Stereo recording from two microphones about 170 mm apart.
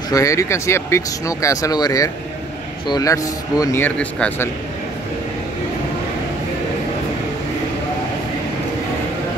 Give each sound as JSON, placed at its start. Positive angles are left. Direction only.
{"t": 0.1, "sound": "speech", "side_deg": 20}